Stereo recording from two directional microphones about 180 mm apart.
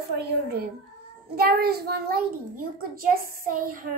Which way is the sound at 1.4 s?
60° right (ahead or behind).